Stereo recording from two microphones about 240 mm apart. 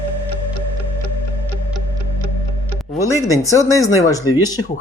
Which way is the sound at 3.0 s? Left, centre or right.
Centre.